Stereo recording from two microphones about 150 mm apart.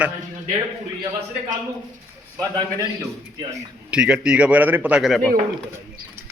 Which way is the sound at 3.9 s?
5° right (ahead or behind).